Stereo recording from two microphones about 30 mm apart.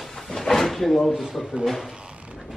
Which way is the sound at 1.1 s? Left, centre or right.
Centre.